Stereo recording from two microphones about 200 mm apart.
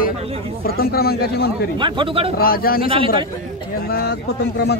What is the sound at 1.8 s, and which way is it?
Speech, 25° right (ahead or behind).